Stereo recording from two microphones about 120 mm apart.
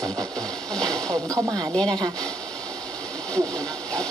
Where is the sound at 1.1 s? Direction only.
25° right (ahead or behind).